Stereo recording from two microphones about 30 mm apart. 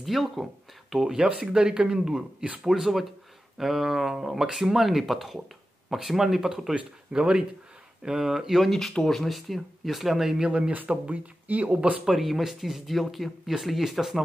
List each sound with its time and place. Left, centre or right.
0.0 s speech: centre
1.0 s speech: right
7.1 s speech: right
8.2 s speech: centre
8.5 s speech: centre
9.3 s speech: centre
10.2 s speech: centre
11.1 s speech: right
11.7 s speech: right
12.1 s speech: centre